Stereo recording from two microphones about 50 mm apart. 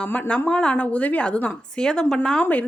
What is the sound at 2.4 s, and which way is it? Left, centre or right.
Speech, left.